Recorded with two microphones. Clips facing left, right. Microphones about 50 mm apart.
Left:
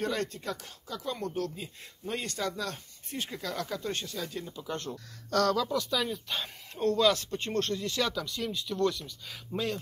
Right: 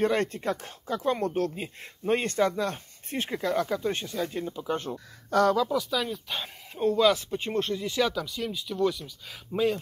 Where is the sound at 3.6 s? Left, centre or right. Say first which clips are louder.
Right 6 dB; right.